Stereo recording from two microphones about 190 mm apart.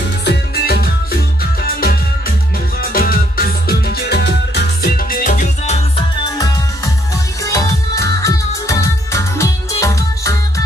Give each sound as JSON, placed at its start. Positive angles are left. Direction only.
{"t": 0.2, "sound": "music", "side_deg": 60}
{"t": 2.8, "sound": "music", "side_deg": 50}
{"t": 5.9, "sound": "music", "side_deg": 20}